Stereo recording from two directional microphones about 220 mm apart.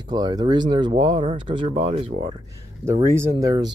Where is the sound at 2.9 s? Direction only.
10° right (ahead or behind).